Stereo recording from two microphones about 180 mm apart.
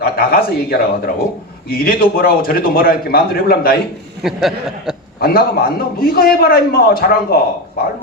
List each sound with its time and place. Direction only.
0.0 s a man's voice: 55° left (ahead or behind)
4.2 s speech: centre (ahead or behind)
5.2 s a man's voice: 55° left (ahead or behind)